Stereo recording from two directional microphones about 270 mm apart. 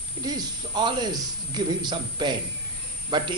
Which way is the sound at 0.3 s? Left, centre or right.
Centre.